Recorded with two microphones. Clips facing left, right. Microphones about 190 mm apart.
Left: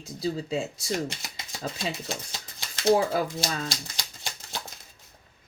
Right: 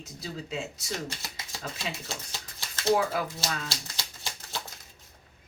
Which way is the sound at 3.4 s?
15° left (ahead or behind).